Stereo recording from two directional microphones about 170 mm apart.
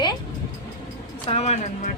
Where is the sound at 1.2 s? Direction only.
40° left (ahead or behind).